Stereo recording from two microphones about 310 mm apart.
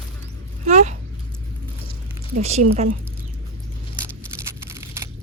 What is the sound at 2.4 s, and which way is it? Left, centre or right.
Speech, right.